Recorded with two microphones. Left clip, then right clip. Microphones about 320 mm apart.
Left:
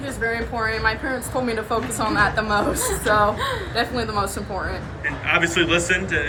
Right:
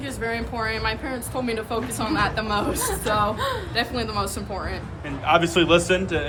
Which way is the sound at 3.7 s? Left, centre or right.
Centre.